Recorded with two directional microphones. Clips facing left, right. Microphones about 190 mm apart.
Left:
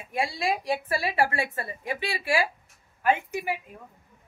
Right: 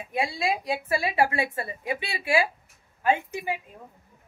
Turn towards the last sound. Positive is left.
turn(degrees=-20)  # may be behind; listen again after turning